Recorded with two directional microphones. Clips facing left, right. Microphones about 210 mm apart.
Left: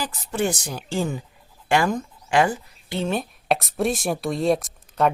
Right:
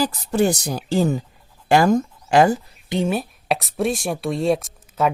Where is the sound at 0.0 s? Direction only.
40° right (ahead or behind).